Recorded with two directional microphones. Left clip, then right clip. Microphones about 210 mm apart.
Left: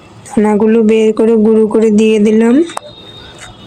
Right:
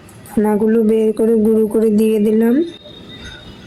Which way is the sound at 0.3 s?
15° left (ahead or behind).